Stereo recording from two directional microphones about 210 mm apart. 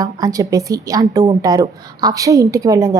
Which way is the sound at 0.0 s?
15° right (ahead or behind).